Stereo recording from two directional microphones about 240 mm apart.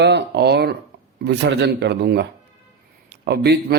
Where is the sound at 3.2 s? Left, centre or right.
Right.